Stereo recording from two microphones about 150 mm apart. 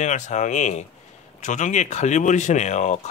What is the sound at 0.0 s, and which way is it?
Speech, 50° left (ahead or behind).